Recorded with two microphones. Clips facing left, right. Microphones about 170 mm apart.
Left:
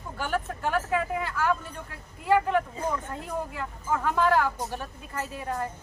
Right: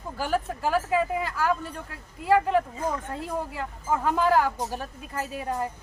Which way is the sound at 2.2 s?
35° right (ahead or behind).